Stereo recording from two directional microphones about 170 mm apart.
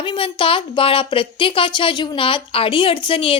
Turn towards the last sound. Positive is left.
turn(degrees=30)  # may be behind; listen again after turning